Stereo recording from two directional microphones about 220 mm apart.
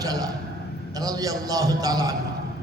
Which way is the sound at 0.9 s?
15° right (ahead or behind).